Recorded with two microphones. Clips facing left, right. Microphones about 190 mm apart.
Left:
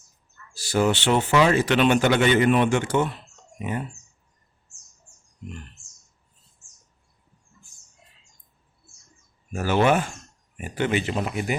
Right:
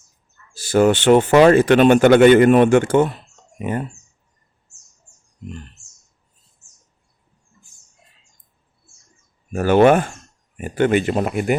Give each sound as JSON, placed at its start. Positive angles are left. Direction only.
{"t": 0.5, "sound": "speech", "side_deg": -50}
{"t": 9.5, "sound": "speech", "side_deg": -55}